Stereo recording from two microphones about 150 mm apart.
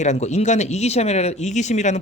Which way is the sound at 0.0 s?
50° left (ahead or behind).